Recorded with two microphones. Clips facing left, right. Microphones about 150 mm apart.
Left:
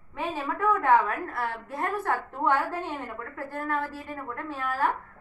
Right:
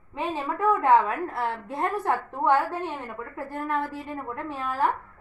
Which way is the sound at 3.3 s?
15° right (ahead or behind).